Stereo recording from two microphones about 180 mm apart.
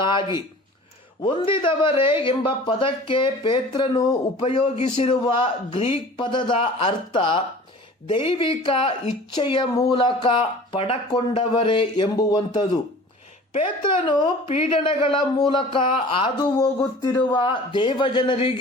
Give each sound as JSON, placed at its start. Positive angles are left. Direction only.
{"t": 0.0, "sound": "speech", "side_deg": 25}
{"t": 14.0, "sound": "speech", "side_deg": 25}